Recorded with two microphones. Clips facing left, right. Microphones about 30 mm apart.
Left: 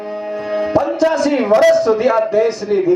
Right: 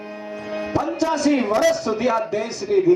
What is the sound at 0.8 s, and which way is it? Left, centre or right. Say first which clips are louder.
Speech: left 5 dB; left.